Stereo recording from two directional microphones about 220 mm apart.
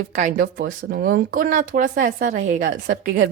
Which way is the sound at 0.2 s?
35° right (ahead or behind).